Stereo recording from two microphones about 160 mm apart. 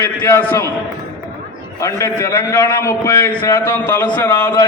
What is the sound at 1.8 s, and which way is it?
A man's voice, 20° left (ahead or behind).